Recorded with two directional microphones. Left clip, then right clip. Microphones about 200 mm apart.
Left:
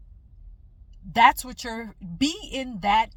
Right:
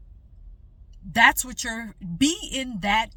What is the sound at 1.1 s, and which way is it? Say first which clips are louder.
A woman's voice: even; 20° right (ahead or behind).